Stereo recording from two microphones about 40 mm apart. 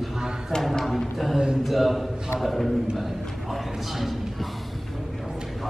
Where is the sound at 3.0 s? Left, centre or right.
Centre.